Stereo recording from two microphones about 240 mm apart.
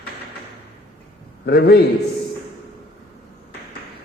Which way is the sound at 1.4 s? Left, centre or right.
Left.